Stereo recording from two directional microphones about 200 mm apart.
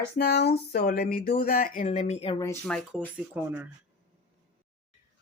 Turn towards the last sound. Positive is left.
turn(degrees=-10)  # may be behind; listen again after turning